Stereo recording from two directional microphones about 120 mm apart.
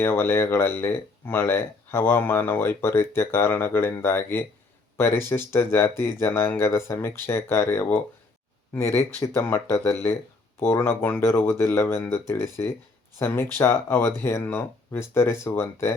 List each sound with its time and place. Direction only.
0.0 s speech: 20° left (ahead or behind)